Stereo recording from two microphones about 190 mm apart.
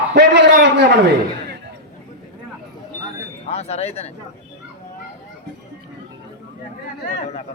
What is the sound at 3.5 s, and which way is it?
Speech, 35° left (ahead or behind).